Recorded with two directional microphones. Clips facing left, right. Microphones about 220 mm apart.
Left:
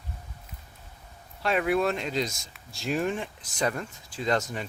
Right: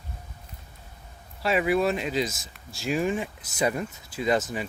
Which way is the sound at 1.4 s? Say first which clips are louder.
Right 2 dB; 5° right (ahead or behind).